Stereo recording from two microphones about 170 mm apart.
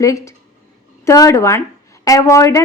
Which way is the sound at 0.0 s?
20° left (ahead or behind).